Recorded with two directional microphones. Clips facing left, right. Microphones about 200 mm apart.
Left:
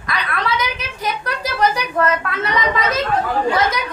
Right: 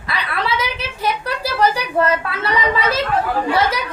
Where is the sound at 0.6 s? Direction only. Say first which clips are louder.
Right 1 dB; 30° right (ahead or behind).